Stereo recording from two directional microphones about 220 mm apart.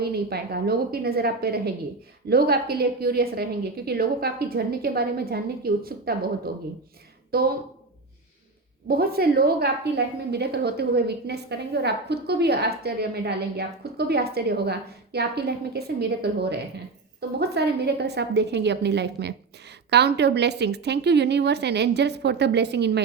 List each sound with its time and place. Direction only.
0.0 s a woman's voice: 45° right (ahead or behind)
8.9 s a woman's voice: 45° right (ahead or behind)